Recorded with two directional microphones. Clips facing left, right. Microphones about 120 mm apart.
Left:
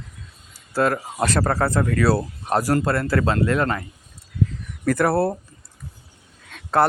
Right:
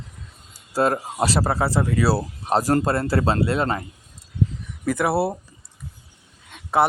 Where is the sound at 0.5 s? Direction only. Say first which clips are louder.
Even; 15° right (ahead or behind).